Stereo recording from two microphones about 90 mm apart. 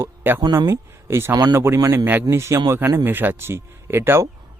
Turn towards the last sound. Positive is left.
turn(degrees=-30)  # may be behind; listen again after turning